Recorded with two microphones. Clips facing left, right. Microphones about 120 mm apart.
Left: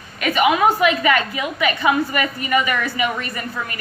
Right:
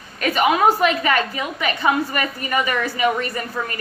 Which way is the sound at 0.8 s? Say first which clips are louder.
Left 1 dB; 40° right (ahead or behind).